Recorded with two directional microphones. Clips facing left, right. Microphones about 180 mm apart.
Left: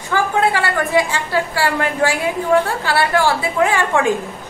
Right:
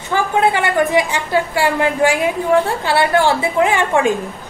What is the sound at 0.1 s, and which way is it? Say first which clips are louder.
A woman's voice: right 1 dB; 20° right (ahead or behind).